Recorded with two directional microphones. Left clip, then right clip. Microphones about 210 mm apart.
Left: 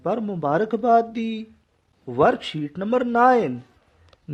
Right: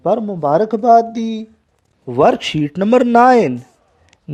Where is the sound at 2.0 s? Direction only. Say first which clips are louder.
Right 6 dB; 25° right (ahead or behind).